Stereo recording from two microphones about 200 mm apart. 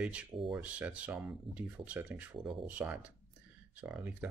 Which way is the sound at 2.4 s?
25° right (ahead or behind).